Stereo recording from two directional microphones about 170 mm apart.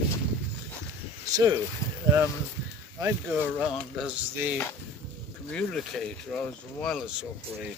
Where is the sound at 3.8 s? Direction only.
5° right (ahead or behind).